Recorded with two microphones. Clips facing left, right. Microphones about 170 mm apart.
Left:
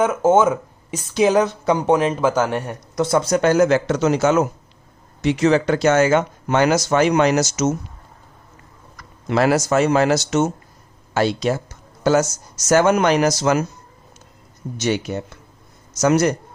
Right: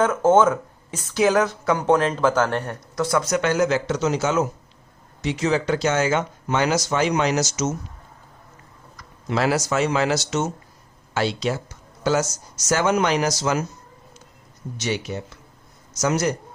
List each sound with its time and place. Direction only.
0.0 s speech: 10° left (ahead or behind); by 7.7 s 60° left (ahead or behind)
9.0 s speech: 50° left (ahead or behind)
14.8 s speech: 50° left (ahead or behind)